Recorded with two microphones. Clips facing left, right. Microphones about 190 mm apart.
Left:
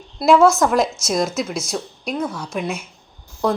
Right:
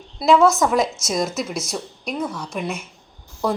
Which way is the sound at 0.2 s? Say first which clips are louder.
Left 2 dB; centre (ahead or behind).